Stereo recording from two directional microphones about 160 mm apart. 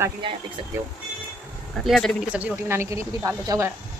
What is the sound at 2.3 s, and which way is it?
Speech, 15° right (ahead or behind).